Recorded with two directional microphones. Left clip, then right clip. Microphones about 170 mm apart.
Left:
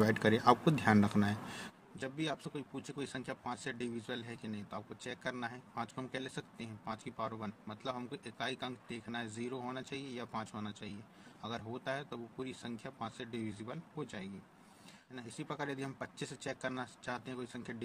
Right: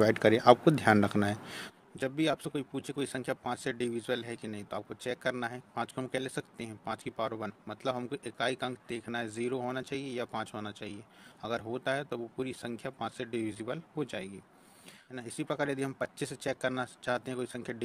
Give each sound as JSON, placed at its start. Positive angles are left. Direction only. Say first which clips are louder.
{"t": 0.0, "sound": "speech", "louder": "right 6 dB", "side_deg": -40}